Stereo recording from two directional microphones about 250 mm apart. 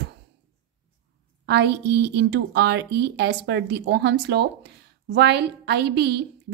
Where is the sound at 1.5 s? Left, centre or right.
Right.